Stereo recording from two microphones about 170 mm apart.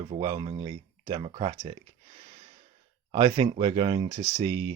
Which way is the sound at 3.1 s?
30° right (ahead or behind).